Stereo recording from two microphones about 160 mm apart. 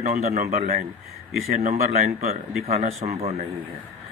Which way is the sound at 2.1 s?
40° right (ahead or behind).